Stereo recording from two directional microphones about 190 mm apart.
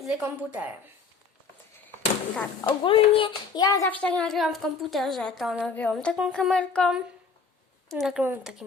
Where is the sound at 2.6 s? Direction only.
25° left (ahead or behind).